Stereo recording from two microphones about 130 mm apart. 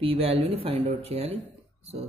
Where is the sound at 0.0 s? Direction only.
45° right (ahead or behind).